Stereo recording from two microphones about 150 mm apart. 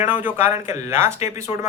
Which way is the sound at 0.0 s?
15° right (ahead or behind).